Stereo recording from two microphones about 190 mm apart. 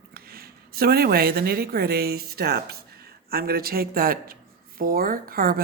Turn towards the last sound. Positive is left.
turn(degrees=-50)  # may be behind; listen again after turning